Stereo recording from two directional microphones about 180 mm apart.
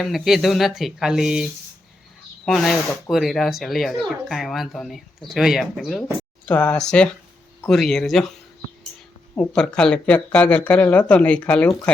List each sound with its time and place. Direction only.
0.0 s speech: centre (ahead or behind)
9.5 s speech: 5° left (ahead or behind)